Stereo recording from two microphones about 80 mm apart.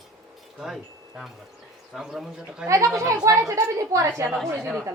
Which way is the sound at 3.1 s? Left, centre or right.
Right.